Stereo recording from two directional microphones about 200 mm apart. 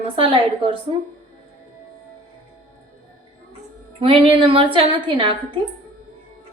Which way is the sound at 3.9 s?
25° right (ahead or behind).